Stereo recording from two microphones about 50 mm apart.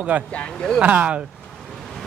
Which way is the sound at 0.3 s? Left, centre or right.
Left.